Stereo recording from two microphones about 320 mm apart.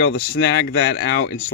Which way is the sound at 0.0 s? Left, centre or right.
Left.